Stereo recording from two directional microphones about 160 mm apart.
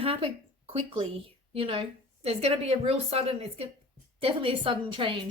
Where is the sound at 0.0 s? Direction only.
35° right (ahead or behind).